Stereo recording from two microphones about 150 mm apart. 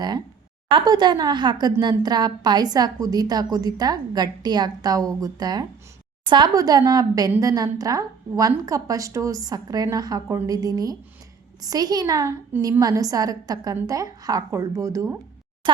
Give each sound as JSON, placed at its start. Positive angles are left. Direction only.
{"t": 0.7, "sound": "a woman's voice", "side_deg": -30}